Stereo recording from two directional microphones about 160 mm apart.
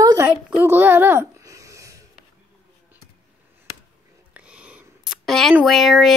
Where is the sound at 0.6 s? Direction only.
15° right (ahead or behind).